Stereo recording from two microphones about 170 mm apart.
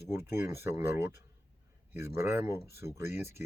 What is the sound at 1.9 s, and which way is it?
Speech, 15° right (ahead or behind).